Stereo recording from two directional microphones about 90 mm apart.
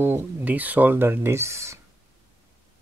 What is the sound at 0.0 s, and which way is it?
Speech, 20° right (ahead or behind).